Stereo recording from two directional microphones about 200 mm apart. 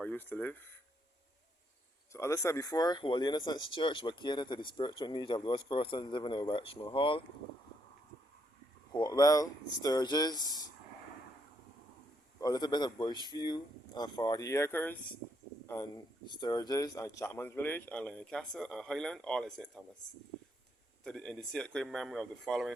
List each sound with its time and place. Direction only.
0.0 s speech: 10° left (ahead or behind)
2.1 s speech: 15° left (ahead or behind)
8.9 s speech: 20° left (ahead or behind)
12.4 s speech: 20° left (ahead or behind); by 19.8 s 5° left (ahead or behind)
21.0 s speech: 5° left (ahead or behind)